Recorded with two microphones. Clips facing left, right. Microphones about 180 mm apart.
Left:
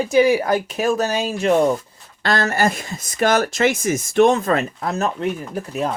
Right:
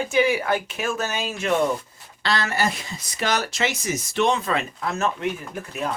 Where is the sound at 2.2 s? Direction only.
50° left (ahead or behind).